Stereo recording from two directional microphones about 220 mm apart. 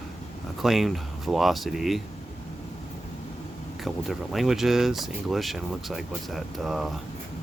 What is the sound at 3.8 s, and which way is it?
Speech, centre (ahead or behind).